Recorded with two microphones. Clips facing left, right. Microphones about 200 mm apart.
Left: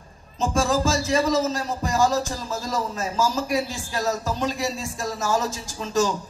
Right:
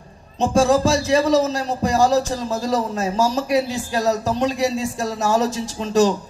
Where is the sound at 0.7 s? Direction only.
65° right (ahead or behind).